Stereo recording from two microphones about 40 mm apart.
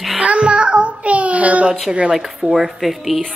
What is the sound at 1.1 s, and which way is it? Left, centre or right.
Speech, right.